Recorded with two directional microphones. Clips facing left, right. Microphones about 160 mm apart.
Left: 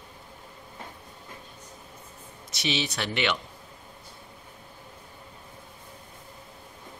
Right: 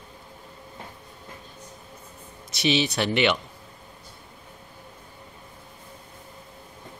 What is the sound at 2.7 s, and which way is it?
Speech, 20° right (ahead or behind).